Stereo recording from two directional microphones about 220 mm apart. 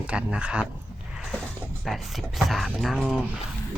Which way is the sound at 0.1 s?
5° right (ahead or behind).